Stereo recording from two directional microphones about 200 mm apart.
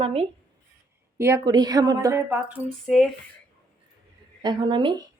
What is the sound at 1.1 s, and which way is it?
A woman's voice, 10° right (ahead or behind).